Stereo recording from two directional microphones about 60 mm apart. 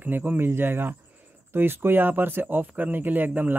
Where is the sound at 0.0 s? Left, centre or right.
Right.